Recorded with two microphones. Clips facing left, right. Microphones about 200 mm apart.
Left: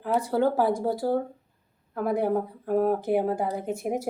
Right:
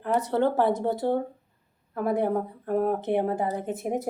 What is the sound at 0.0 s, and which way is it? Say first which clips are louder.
Speech: even; 5° left (ahead or behind).